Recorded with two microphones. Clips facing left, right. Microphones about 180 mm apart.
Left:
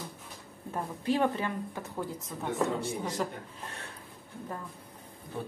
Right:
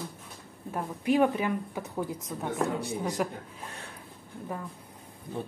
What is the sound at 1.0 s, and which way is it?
A woman's voice, 15° right (ahead or behind).